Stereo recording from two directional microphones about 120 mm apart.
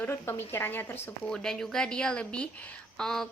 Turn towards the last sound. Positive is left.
turn(degrees=5)  # may be behind; listen again after turning